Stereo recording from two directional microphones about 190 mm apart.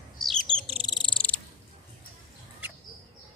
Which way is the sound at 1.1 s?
5° left (ahead or behind).